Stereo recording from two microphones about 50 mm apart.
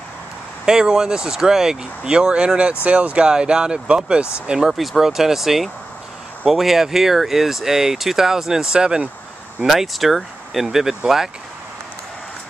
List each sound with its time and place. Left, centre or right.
0.7 s speech: centre
9.6 s speech: centre